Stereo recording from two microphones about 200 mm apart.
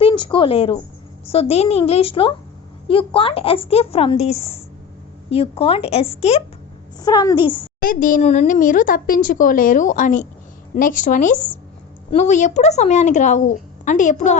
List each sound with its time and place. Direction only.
0.0 s speech: 25° left (ahead or behind)
7.0 s speech: 20° left (ahead or behind)
7.8 s speech: 45° left (ahead or behind)